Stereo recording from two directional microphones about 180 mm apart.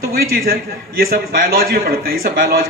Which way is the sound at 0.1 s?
55° right (ahead or behind).